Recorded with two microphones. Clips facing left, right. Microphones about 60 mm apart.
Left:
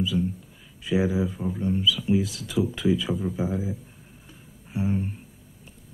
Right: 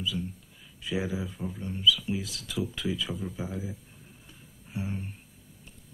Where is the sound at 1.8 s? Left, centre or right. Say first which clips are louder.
Left 1 dB; centre.